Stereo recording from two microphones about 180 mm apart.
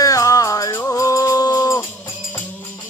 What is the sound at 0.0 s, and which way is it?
Music, 20° left (ahead or behind).